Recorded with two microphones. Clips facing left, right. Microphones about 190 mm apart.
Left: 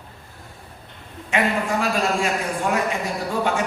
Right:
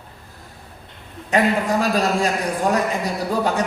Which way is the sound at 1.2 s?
40° right (ahead or behind).